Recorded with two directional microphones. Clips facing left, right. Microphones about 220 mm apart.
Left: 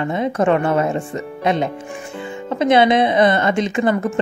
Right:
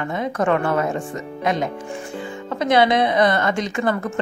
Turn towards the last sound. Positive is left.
turn(degrees=20)  # may be behind; listen again after turning